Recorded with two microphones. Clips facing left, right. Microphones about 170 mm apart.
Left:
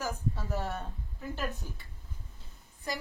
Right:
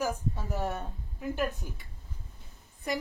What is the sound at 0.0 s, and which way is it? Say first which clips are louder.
A woman's voice: right 3 dB; 15° right (ahead or behind).